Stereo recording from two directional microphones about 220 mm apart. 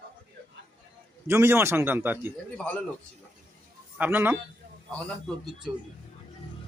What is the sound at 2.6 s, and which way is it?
Speech, 5° left (ahead or behind).